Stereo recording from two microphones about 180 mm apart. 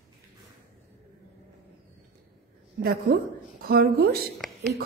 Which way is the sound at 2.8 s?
55° right (ahead or behind).